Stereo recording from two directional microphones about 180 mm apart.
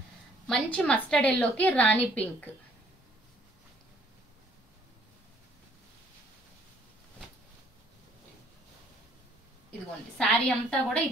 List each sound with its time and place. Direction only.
0.5 s a woman's voice: 5° left (ahead or behind)
10.1 s a woman's voice: 5° left (ahead or behind)